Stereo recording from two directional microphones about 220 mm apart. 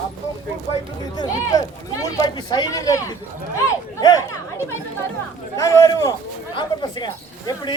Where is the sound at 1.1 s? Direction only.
15° left (ahead or behind).